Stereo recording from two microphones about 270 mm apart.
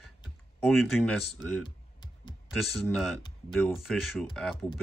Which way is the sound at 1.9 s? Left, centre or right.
Centre.